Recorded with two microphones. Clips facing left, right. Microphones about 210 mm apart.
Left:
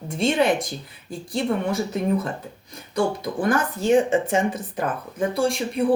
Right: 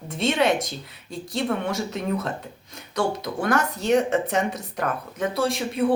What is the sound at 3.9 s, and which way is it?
Speech, 65° right (ahead or behind).